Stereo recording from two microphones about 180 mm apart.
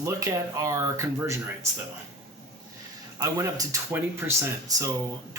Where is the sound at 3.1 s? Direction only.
20° right (ahead or behind).